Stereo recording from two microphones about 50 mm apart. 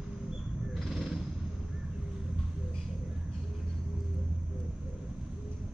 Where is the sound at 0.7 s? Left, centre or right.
Centre.